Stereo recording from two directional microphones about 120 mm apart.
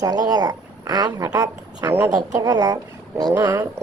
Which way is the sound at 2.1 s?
30° right (ahead or behind).